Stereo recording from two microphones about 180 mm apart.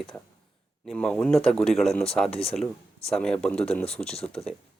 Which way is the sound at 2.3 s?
30° left (ahead or behind).